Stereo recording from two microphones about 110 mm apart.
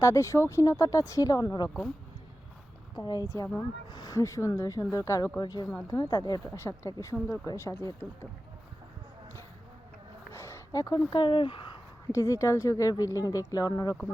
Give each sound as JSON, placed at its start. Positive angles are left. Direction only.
{"t": 0.0, "sound": "speech", "side_deg": 30}
{"t": 2.9, "sound": "speech", "side_deg": 35}
{"t": 10.3, "sound": "a sound", "side_deg": 25}
{"t": 11.1, "sound": "speech", "side_deg": 50}
{"t": 12.1, "sound": "speech", "side_deg": 30}